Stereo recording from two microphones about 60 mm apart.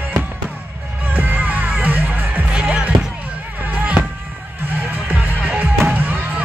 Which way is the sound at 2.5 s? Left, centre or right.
Centre.